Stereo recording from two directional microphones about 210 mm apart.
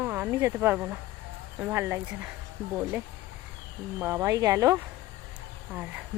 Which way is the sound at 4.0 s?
10° right (ahead or behind).